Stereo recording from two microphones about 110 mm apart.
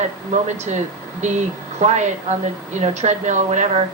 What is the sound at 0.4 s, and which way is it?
Speech, 90° right.